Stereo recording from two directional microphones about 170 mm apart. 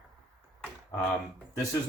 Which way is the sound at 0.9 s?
10° left (ahead or behind).